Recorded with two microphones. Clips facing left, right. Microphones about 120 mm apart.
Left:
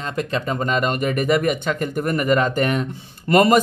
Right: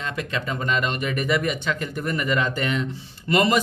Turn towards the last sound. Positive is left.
turn(degrees=45)  # may be behind; listen again after turning